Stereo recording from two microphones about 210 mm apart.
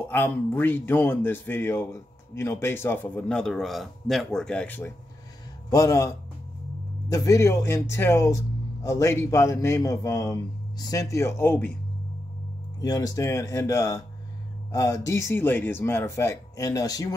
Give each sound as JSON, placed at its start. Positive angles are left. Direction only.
{"t": 0.1, "sound": "speech", "side_deg": 10}
{"t": 12.8, "sound": "speech", "side_deg": 15}